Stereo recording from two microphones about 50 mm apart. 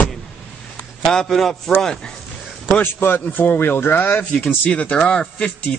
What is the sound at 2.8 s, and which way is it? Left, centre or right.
A man's voice, left.